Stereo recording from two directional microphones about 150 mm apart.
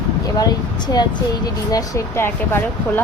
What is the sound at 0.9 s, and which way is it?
Speech, 25° left (ahead or behind).